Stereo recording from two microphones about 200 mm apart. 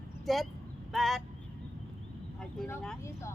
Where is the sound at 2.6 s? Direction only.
5° left (ahead or behind).